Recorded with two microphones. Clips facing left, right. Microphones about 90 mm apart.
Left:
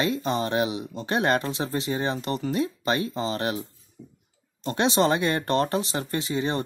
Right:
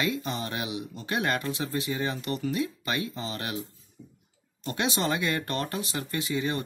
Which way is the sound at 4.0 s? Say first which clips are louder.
Left 3 dB; 5° right (ahead or behind).